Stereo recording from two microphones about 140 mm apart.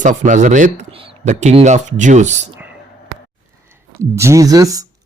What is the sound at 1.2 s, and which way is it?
Speech, 55° right (ahead or behind).